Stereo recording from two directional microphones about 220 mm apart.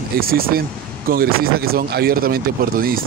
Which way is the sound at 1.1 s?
45° right (ahead or behind).